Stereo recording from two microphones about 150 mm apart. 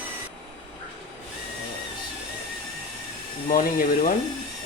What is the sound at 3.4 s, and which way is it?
Speech, 65° left (ahead or behind).